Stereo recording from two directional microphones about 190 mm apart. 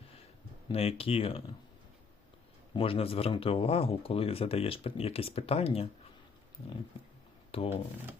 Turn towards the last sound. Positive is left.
turn(degrees=30)  # may be behind; listen again after turning